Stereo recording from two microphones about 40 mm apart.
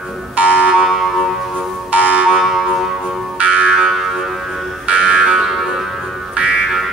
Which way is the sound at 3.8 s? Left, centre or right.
Centre.